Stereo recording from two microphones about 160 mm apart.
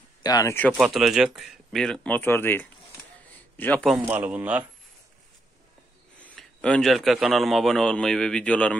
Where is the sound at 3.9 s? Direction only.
10° right (ahead or behind).